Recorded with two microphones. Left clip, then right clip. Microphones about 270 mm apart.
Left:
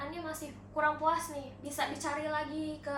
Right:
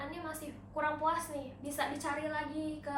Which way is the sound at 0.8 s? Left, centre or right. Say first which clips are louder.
Left 3 dB; centre.